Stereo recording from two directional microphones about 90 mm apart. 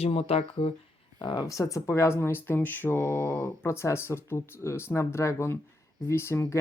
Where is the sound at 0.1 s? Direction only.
90° left.